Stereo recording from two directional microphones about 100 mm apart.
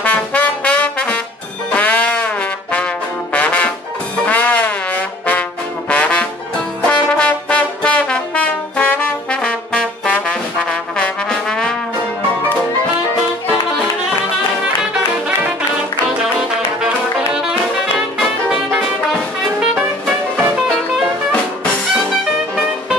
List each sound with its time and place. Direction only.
0.0 s brass instrument: 15° left (ahead or behind)
1.7 s music: 15° left (ahead or behind)
5.9 s trombone: 10° left (ahead or behind)
6.9 s brass instrument: 10° left (ahead or behind)
16.2 s music: 5° right (ahead or behind)
20.5 s music: centre (ahead or behind)